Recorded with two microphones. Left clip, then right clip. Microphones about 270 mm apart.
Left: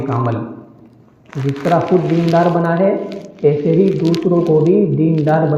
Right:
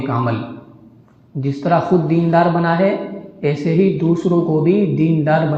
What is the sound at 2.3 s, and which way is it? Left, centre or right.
Speech, right.